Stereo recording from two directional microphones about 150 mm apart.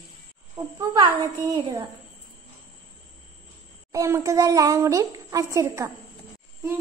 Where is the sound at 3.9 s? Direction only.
20° right (ahead or behind).